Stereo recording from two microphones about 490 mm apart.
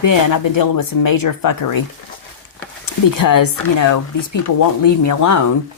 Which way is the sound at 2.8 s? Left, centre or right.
Left.